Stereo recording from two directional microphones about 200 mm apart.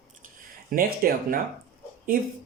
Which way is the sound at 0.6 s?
45° right (ahead or behind).